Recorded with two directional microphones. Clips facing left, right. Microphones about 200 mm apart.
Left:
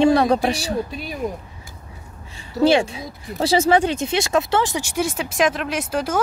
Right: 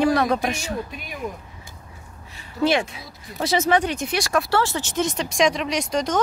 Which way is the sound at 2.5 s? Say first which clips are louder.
Left 5 dB; 30° left (ahead or behind).